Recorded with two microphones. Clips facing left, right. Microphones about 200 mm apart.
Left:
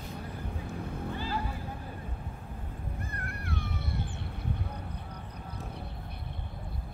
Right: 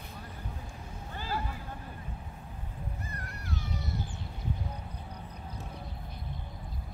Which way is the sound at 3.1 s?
55° left (ahead or behind).